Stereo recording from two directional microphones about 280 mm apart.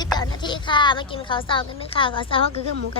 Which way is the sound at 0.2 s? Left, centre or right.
Centre.